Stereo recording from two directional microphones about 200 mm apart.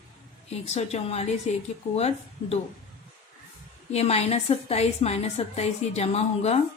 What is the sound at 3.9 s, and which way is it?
A woman's voice, 30° left (ahead or behind).